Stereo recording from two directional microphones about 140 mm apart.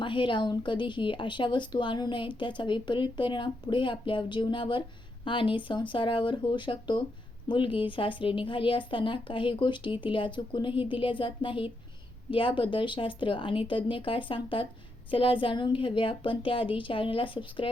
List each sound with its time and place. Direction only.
0.0 s speech: 35° left (ahead or behind)